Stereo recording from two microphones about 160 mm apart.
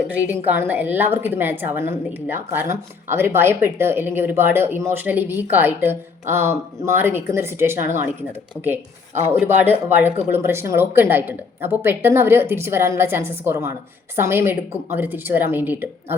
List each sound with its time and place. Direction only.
0.1 s a woman's voice: 10° right (ahead or behind)